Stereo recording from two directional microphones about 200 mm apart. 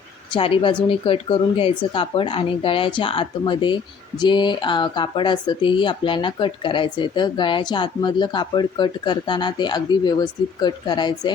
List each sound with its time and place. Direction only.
0.3 s speech: 25° left (ahead or behind)